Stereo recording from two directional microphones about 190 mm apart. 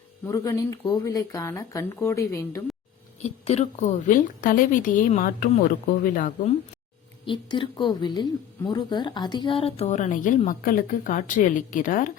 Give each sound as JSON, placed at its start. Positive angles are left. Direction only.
{"t": 0.3, "sound": "speech", "side_deg": 20}
{"t": 3.2, "sound": "a woman's voice", "side_deg": 35}
{"t": 7.3, "sound": "a woman's voice", "side_deg": 25}